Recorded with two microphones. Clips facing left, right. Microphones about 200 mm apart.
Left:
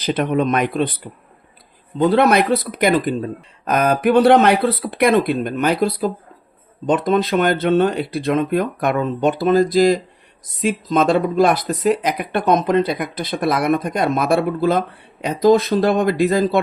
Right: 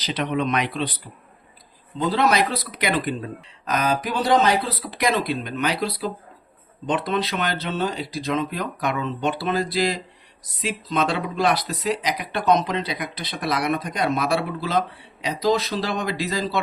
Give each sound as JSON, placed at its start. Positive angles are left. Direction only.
{"t": 0.0, "sound": "speech", "side_deg": 50}
{"t": 3.7, "sound": "speech", "side_deg": 55}